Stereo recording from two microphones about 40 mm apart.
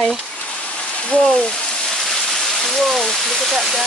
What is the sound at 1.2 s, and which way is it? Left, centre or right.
Speech, left.